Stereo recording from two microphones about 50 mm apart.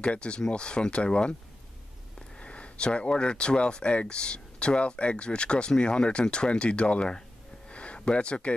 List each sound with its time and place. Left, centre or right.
0.0 s speech: left
2.3 s speech: left
7.7 s a sound: left